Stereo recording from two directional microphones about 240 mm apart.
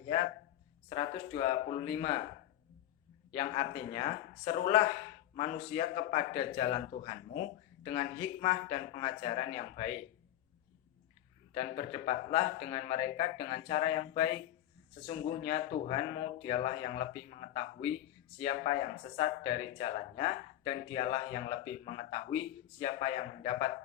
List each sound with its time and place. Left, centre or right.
0.9 s speech: left
3.3 s speech: left
11.5 s speech: left